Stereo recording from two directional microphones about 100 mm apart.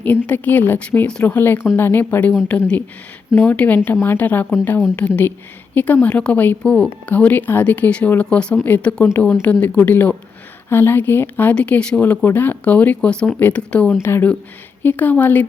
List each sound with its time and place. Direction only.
0.3 s speech: 15° left (ahead or behind)
14.0 s speech: 25° left (ahead or behind)